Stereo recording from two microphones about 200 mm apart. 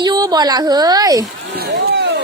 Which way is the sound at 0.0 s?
20° right (ahead or behind).